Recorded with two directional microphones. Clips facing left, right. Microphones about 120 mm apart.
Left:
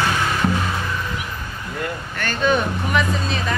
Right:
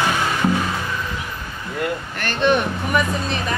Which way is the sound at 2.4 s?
Centre (ahead or behind).